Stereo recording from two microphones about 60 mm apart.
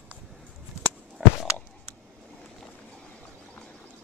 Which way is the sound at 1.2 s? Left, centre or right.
Centre.